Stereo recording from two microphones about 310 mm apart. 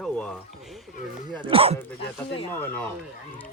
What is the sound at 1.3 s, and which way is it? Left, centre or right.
Speech, centre.